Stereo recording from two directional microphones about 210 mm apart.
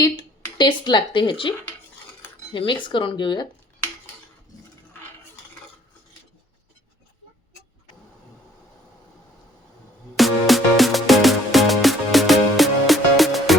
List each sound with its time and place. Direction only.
0.0 s speech: 20° left (ahead or behind)
10.2 s music: centre (ahead or behind)